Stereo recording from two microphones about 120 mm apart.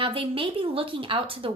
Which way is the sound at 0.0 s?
50° right (ahead or behind).